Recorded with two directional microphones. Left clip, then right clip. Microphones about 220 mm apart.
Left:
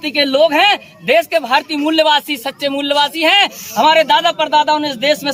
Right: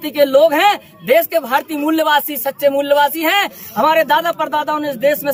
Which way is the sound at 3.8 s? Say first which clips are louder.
Left 2 dB; 20° left (ahead or behind).